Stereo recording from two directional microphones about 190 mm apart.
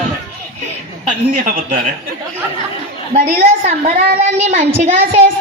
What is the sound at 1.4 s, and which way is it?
Speech, 45° right (ahead or behind).